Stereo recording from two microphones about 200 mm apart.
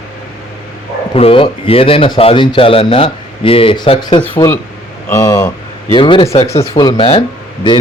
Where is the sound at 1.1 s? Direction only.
30° left (ahead or behind).